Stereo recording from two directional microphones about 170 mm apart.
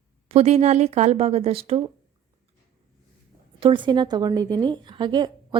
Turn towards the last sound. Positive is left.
turn(degrees=-25)  # may be behind; listen again after turning